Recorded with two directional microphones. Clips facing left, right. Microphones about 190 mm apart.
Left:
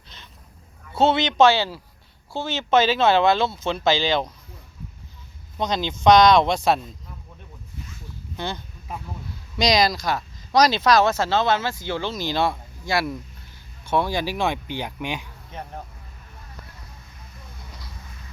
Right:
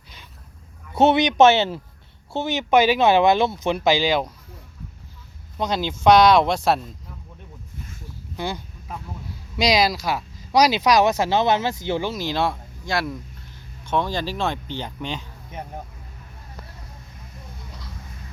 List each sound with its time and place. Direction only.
0.9 s a man's voice: 20° right (ahead or behind)
5.5 s speech: 5° right (ahead or behind)
7.8 s a sound: 50° right (ahead or behind)
8.4 s speech: 10° right (ahead or behind)
12.1 s speech: centre (ahead or behind)
15.5 s speech: 10° right (ahead or behind)